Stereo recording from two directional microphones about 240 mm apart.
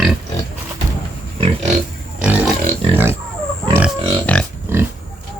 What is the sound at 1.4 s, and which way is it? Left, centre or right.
Pig, right.